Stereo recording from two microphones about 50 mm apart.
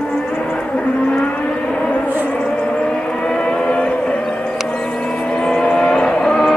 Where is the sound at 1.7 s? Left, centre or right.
Left.